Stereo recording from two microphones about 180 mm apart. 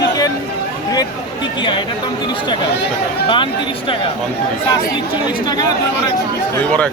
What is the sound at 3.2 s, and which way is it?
Speech, 25° left (ahead or behind).